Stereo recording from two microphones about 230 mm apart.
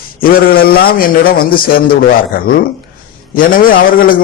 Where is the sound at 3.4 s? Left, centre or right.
Left.